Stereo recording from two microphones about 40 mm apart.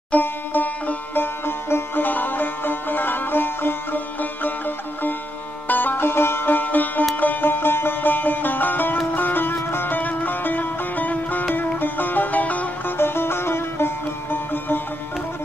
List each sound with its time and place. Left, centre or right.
0.2 s music: left
6.0 s music: left
7.6 s music: left
9.9 s music: left
12.8 s music: left